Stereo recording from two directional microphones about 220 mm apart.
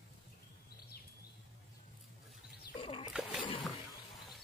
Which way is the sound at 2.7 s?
25° left (ahead or behind).